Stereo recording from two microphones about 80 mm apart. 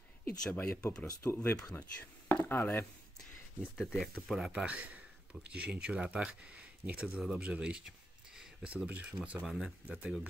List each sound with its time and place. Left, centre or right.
0.2 s speech: centre
3.8 s speech: centre
4.5 s speech: centre